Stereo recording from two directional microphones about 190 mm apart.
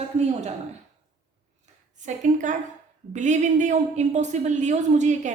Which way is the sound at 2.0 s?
40° right (ahead or behind).